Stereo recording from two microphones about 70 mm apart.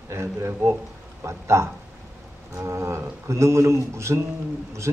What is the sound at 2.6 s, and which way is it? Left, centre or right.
A man's voice, right.